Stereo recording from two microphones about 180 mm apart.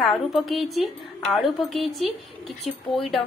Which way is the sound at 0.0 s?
Centre (ahead or behind).